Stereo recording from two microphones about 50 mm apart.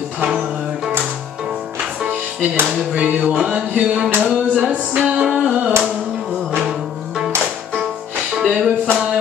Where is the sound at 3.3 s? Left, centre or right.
Centre.